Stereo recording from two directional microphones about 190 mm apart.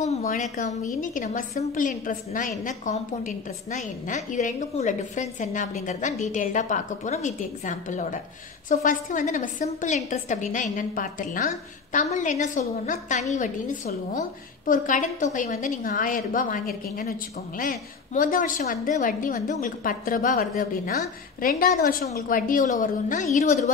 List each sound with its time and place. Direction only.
0.0 s a woman's voice: 40° left (ahead or behind)